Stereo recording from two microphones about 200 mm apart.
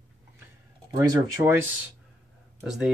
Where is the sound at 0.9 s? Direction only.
20° right (ahead or behind).